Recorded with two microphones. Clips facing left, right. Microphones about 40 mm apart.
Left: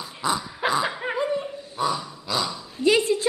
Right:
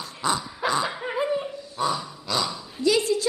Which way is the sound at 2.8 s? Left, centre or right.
Left.